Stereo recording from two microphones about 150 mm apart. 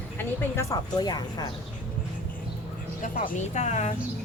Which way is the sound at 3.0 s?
50° left (ahead or behind).